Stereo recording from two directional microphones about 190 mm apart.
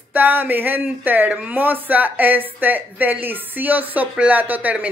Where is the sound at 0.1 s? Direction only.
10° right (ahead or behind).